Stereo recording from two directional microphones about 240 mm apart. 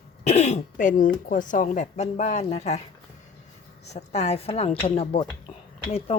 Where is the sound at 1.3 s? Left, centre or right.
Left.